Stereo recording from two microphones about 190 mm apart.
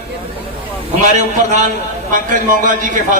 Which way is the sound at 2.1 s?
45° right (ahead or behind).